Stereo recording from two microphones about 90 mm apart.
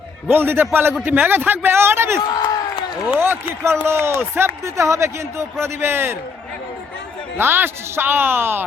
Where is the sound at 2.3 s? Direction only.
55° left (ahead or behind).